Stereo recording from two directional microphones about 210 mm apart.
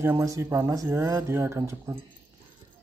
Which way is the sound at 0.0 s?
15° right (ahead or behind).